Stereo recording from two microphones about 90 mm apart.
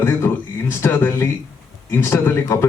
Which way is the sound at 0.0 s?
25° left (ahead or behind).